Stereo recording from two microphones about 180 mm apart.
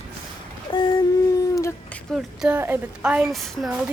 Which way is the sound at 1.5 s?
15° left (ahead or behind).